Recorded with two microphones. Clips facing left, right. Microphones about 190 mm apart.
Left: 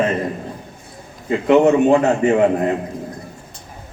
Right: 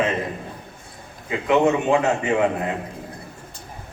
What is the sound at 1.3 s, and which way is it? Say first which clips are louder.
A man's voice: left 6 dB; 40° left (ahead or behind).